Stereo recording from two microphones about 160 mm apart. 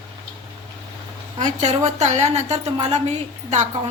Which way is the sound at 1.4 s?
50° right (ahead or behind).